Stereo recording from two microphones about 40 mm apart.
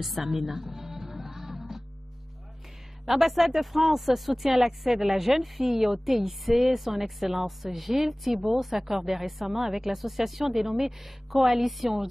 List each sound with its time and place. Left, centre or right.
0.0 s music: centre
3.1 s speech: centre